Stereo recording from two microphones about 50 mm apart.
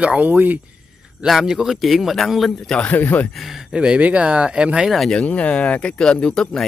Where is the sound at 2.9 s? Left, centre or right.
Left.